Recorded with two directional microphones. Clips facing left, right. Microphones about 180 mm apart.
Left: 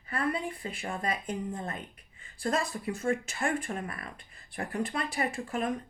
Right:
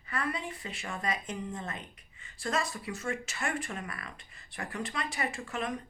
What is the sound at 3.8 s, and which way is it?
Speech, 50° left (ahead or behind).